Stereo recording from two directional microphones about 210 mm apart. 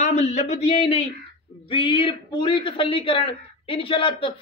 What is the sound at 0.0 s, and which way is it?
Speech, 35° left (ahead or behind).